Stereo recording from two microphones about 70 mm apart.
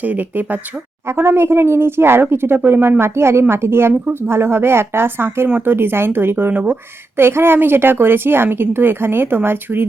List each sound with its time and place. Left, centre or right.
0.0 s speech: right
1.0 s speech: right